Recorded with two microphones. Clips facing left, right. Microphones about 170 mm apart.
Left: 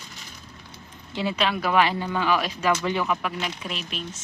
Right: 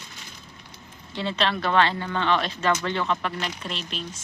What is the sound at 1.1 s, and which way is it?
Speech, 10° left (ahead or behind).